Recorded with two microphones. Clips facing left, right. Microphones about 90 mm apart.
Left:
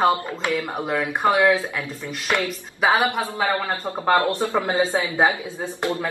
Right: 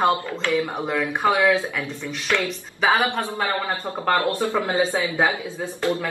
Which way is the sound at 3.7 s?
25° left (ahead or behind).